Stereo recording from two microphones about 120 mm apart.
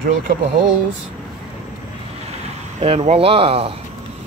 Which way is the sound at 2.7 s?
60° right (ahead or behind).